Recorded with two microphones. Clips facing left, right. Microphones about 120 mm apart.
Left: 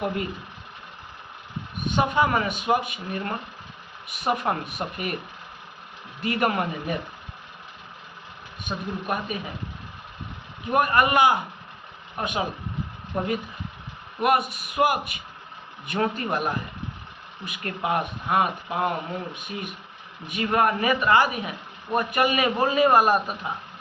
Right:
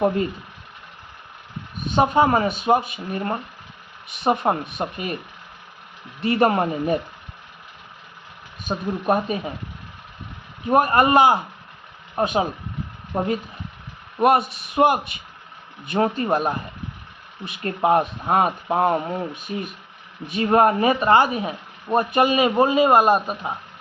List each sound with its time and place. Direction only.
2.0 s speech: 30° right (ahead or behind)
6.2 s speech: 30° right (ahead or behind)
8.6 s speech: 35° right (ahead or behind)
10.7 s speech: 30° right (ahead or behind)
14.2 s speech: 30° right (ahead or behind)